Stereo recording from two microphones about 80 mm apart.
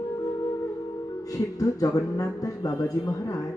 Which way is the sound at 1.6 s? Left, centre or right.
Left.